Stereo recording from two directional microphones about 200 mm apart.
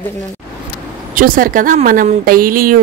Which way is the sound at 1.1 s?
45° right (ahead or behind).